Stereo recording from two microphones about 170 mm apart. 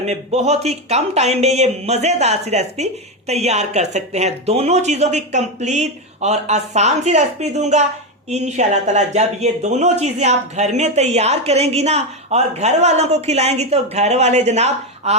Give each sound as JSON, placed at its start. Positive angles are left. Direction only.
{"t": 0.0, "sound": "speech", "side_deg": -40}